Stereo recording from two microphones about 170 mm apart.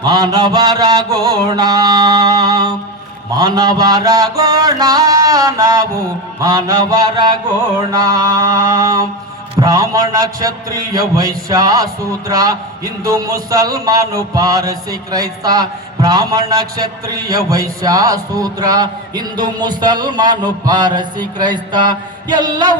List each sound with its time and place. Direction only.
0.0 s a man's voice: 25° right (ahead or behind)
3.3 s mantra: 20° right (ahead or behind)
6.4 s a man's voice: 20° right (ahead or behind)